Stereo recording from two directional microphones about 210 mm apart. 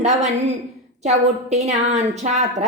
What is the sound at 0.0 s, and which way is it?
A woman's voice, 35° right (ahead or behind).